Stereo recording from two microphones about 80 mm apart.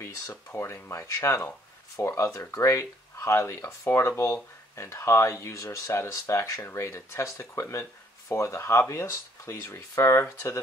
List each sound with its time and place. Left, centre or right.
0.0 s speech: left